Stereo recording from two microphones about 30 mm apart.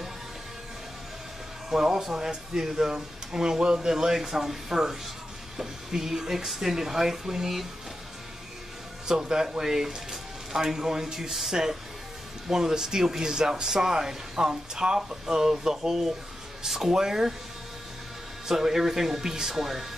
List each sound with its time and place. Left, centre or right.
1.7 s speech: right
9.0 s speech: right
12.4 s speech: centre
18.5 s speech: centre